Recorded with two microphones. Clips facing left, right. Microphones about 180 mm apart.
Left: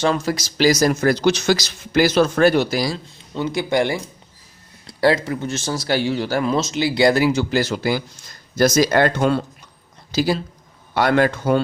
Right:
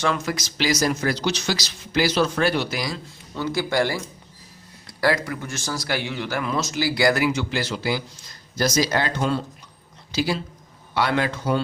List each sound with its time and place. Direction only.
0.0 s a man's voice: 30° left (ahead or behind)
3.3 s a man's voice: 20° left (ahead or behind); by 9.4 s 55° left (ahead or behind)
10.1 s a man's voice: 40° left (ahead or behind)